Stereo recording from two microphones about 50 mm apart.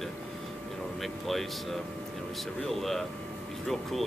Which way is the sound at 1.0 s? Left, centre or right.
Centre.